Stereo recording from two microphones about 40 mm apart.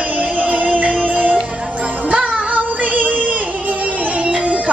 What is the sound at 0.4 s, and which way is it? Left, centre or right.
Music, right.